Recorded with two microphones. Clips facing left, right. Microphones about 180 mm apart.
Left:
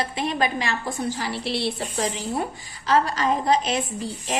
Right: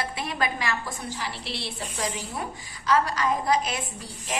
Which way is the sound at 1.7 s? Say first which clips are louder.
Left 4 dB; 35° left (ahead or behind).